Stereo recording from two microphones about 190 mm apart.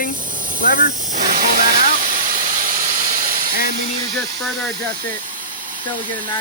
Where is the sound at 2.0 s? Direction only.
45° right (ahead or behind).